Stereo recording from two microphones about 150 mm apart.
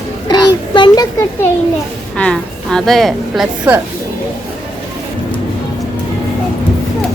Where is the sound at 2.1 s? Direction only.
5° left (ahead or behind).